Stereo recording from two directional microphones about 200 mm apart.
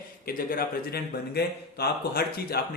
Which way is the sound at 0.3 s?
45° left (ahead or behind).